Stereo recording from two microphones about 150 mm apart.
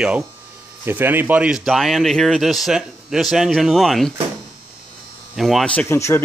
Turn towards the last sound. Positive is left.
turn(degrees=20)  # may be behind; listen again after turning